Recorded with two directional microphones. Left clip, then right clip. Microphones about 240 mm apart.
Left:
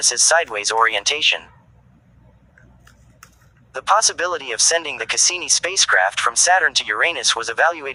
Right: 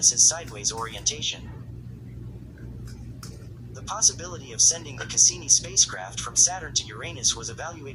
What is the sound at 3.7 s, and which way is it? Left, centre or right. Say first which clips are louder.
Speech: left 9 dB; left.